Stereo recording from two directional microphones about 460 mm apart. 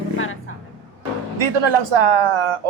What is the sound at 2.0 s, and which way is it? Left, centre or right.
Speech, right.